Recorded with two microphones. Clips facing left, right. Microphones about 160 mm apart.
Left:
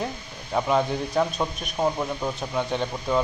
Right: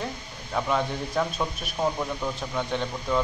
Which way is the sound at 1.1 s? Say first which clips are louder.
Left 3 dB; 15° left (ahead or behind).